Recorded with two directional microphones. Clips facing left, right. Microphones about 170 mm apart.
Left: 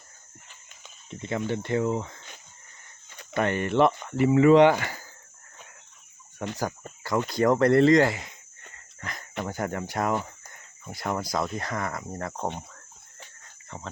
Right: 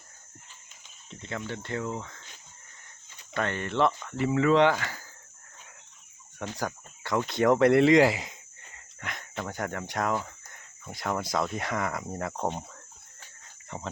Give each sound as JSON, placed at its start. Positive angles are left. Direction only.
{"t": 1.5, "sound": "speech", "side_deg": 15}
{"t": 3.3, "sound": "speech", "side_deg": 15}
{"t": 7.0, "sound": "speech", "side_deg": 0}
{"t": 9.0, "sound": "cricket", "side_deg": 0}
{"t": 9.5, "sound": "speech", "side_deg": 5}
{"t": 13.7, "sound": "speech", "side_deg": -10}